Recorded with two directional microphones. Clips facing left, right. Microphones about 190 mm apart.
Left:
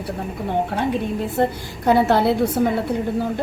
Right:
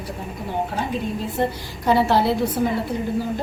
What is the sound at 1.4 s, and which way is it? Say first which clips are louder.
A woman's voice: left 3 dB; 55° left (ahead or behind).